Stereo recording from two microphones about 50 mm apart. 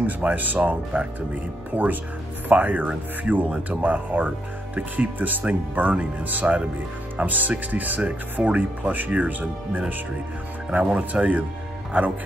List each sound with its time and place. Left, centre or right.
0.0 s speech: right